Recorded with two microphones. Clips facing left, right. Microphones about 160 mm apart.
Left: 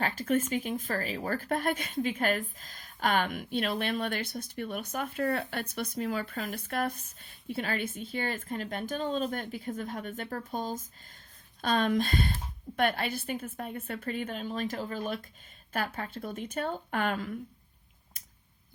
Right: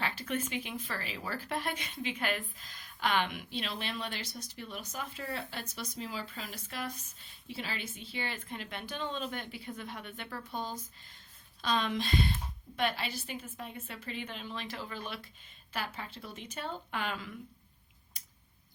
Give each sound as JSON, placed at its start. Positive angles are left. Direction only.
{"t": 0.0, "sound": "speech", "side_deg": 45}